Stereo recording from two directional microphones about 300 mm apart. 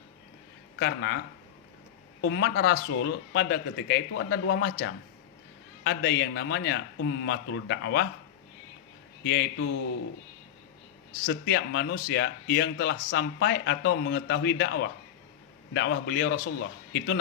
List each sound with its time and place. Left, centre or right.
0.8 s speech: left
2.2 s speech: left
9.2 s speech: left
11.3 s speech: left